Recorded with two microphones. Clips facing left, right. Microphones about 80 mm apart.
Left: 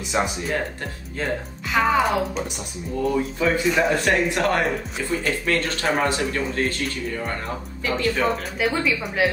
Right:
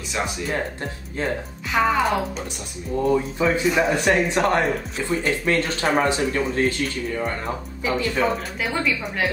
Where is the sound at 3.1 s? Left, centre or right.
Centre.